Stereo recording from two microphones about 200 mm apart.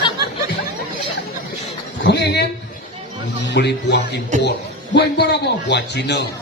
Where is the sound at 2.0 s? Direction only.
55° left (ahead or behind).